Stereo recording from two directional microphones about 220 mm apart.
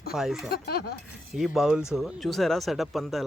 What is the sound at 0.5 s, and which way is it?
Speech, 45° left (ahead or behind).